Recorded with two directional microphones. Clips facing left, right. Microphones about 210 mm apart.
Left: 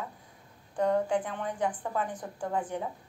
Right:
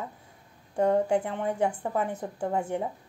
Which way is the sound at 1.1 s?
25° right (ahead or behind).